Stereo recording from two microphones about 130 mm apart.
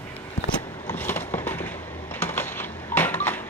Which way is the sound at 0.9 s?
15° left (ahead or behind).